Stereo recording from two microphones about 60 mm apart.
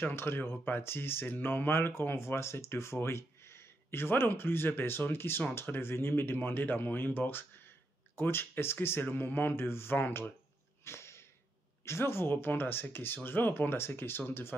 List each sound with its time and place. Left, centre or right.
0.0 s speech: left
10.8 s a sound: left
11.8 s speech: left